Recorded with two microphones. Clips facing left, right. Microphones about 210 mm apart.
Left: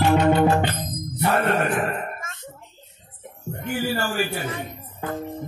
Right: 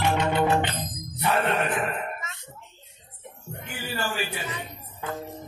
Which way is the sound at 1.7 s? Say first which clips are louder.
Left 3 dB; 45° left (ahead or behind).